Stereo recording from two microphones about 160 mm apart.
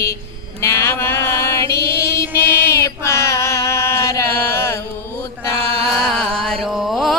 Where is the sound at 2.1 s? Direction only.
15° left (ahead or behind).